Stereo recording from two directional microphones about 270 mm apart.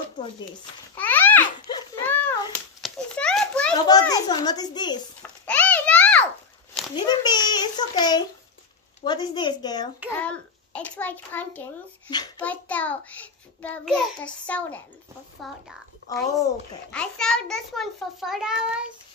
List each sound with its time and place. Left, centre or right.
0.9 s babbling: centre
2.8 s a sound: centre
3.8 s a child's voice: centre
5.2 s a sound: centre
7.1 s a child's voice: centre
10.1 s a child's voice: centre
16.1 s a child's voice: centre